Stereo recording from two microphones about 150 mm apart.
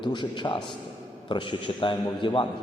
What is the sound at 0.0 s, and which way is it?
A man's voice, 30° left (ahead or behind).